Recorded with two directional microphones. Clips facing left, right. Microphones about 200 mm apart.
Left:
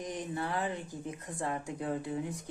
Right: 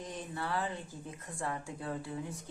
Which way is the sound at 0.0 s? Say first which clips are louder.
Left 4 dB; 15° left (ahead or behind).